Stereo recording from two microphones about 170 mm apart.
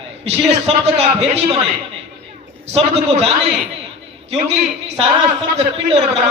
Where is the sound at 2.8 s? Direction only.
35° right (ahead or behind).